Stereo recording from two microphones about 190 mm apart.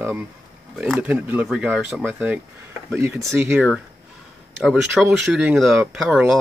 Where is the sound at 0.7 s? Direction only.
Centre (ahead or behind).